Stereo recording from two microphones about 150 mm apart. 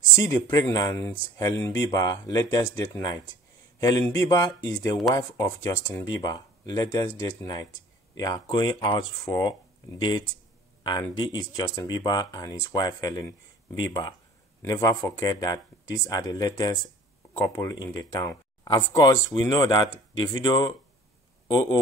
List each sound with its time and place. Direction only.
0.1 s speech: 20° left (ahead or behind)